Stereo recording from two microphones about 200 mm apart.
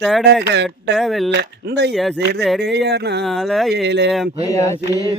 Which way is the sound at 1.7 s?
60° right (ahead or behind).